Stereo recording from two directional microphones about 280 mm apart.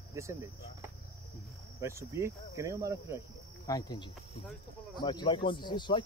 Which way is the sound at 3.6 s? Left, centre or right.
Centre.